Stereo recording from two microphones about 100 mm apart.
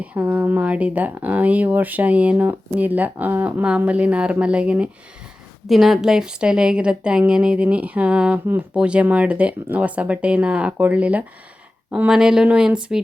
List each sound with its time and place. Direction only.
0.0 s a woman's voice: 15° right (ahead or behind)